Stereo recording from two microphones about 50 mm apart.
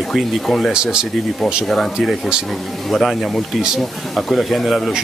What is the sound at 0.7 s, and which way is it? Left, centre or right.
Speech, centre.